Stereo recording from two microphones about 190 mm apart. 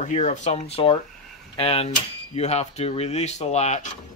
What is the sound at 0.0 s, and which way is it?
Speech, 40° left (ahead or behind).